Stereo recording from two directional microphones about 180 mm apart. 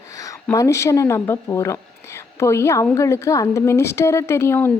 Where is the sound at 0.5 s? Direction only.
15° left (ahead or behind).